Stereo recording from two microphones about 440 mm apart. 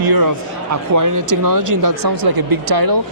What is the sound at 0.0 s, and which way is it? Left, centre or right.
Speech, right.